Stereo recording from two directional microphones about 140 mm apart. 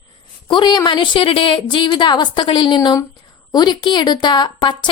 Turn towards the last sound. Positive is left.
turn(degrees=35)  # may be behind; listen again after turning